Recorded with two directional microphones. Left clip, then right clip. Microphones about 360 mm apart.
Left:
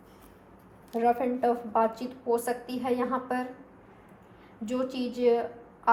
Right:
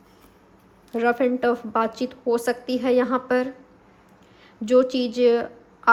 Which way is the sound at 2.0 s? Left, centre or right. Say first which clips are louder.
Right 5 dB; right.